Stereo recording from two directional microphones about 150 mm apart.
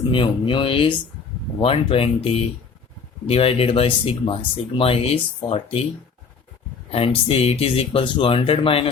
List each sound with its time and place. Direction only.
0.1 s speech: 35° left (ahead or behind)
6.9 s speech: 40° left (ahead or behind)